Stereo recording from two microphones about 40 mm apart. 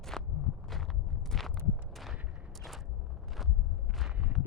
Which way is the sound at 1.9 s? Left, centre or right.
Centre.